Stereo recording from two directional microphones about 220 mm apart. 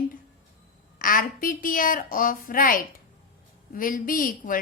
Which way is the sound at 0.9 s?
40° left (ahead or behind).